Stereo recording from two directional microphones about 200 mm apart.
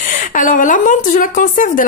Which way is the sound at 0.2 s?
40° left (ahead or behind).